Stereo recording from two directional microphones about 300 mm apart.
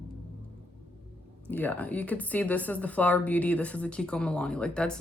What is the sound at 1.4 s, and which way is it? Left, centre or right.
Speech, centre.